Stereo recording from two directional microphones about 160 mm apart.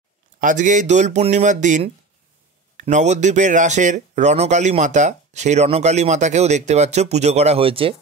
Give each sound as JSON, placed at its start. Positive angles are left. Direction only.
{"t": 0.4, "sound": "speech", "side_deg": -50}